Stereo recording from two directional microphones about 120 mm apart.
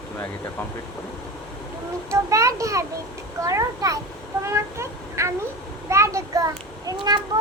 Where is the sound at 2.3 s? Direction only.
25° right (ahead or behind).